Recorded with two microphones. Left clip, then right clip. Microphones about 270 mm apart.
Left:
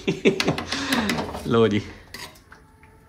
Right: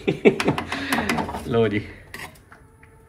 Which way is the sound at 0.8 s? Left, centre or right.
Centre.